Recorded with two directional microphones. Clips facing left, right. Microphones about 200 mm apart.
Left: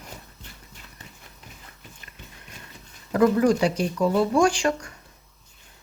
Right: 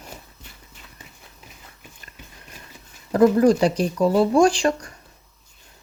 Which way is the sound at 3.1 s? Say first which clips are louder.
Right 4 dB; 35° right (ahead or behind).